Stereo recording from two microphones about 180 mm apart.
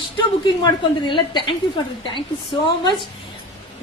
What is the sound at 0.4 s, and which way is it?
A woman's voice, 25° left (ahead or behind).